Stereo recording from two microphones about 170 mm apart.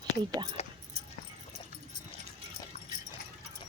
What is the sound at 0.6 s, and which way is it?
Keys jangling, 40° left (ahead or behind).